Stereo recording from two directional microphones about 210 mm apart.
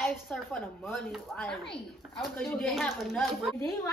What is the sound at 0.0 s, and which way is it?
Speech, centre (ahead or behind).